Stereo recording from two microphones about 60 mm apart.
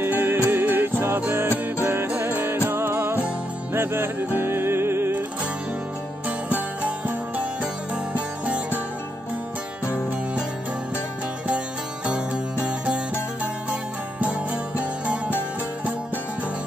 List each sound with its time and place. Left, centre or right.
0.0 s music: right
12.1 s music: centre
14.8 s music: right